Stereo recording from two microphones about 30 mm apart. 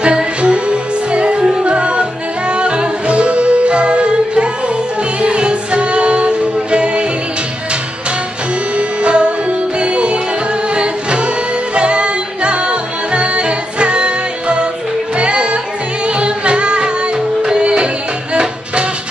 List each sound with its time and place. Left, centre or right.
0.0 s music: right
8.7 s music: right